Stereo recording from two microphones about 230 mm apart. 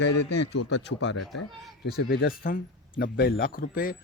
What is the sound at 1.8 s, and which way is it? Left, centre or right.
Speech, left.